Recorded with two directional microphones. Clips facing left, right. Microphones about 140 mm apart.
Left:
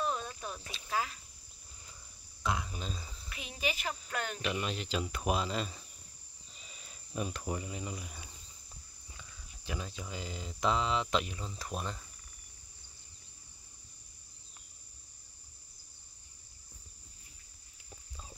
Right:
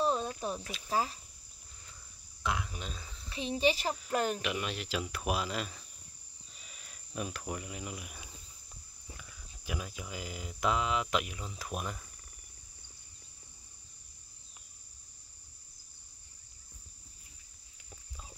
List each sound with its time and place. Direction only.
0.0 s cricket: 35° right (ahead or behind)
0.8 s speech: 35° right (ahead or behind)
2.4 s speech: centre (ahead or behind)
3.3 s speech: 30° right (ahead or behind)
4.4 s speech: centre (ahead or behind)
6.5 s cricket: centre (ahead or behind)
9.7 s speech: 10° right (ahead or behind)